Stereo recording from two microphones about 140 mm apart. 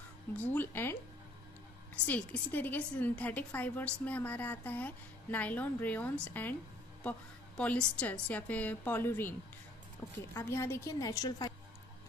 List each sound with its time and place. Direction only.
0.3 s a woman's voice: 10° left (ahead or behind)
2.0 s a woman's voice: 10° left (ahead or behind)
10.3 s a woman's voice: 20° left (ahead or behind)